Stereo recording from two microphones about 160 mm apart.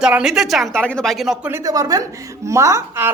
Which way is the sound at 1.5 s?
20° right (ahead or behind).